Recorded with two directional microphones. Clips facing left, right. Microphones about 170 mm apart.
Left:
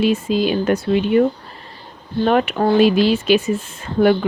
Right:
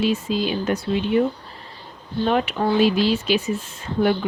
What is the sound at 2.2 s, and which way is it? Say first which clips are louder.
Speech: left 4 dB; 60° left (ahead or behind).